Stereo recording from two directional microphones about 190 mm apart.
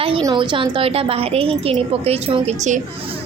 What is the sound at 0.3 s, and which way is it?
A woman's voice, 25° right (ahead or behind).